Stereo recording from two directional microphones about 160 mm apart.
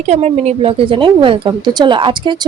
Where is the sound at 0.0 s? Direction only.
45° right (ahead or behind).